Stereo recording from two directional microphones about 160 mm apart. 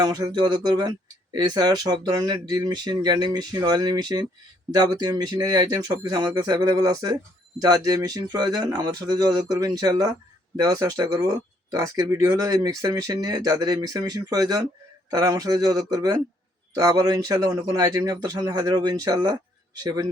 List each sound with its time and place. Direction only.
0.0 s speech: 25° right (ahead or behind)